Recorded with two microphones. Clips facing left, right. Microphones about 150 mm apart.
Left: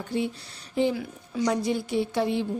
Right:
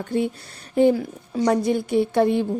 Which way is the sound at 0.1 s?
50° right (ahead or behind).